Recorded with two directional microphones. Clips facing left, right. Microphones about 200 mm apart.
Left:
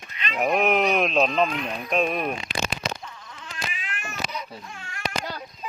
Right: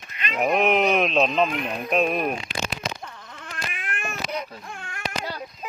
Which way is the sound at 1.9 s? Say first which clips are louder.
Right 2 dB; centre (ahead or behind).